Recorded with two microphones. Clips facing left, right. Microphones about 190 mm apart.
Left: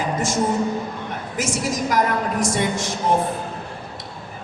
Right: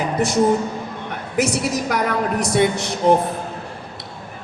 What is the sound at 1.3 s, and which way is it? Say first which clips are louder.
A woman's voice: right 5 dB; 65° right (ahead or behind).